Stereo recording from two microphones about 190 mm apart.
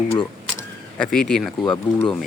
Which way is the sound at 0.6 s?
5° left (ahead or behind).